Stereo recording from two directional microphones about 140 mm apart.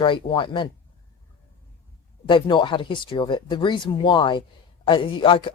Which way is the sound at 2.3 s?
35° left (ahead or behind).